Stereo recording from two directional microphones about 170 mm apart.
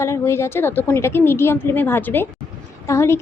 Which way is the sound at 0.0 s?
15° left (ahead or behind).